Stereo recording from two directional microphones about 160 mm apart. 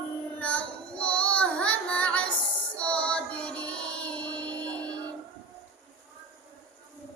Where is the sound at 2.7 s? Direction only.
5° left (ahead or behind).